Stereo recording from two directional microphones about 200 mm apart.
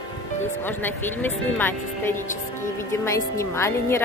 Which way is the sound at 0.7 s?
10° left (ahead or behind).